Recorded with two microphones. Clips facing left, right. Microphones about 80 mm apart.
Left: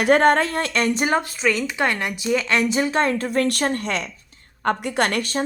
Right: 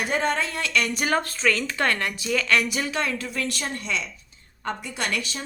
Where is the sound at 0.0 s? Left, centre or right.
Left.